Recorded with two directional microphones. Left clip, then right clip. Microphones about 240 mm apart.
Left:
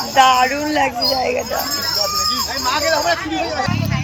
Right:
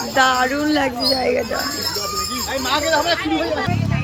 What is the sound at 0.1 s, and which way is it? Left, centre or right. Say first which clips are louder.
Speech: left 4 dB; centre.